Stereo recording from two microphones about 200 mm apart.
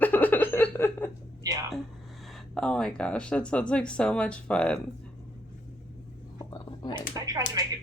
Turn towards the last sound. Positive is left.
turn(degrees=-20)  # may be behind; listen again after turning